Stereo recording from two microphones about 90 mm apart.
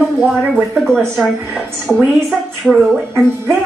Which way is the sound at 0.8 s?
5° left (ahead or behind).